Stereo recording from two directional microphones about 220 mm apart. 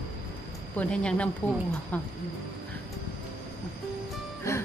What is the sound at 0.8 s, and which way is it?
Speech, 5° left (ahead or behind).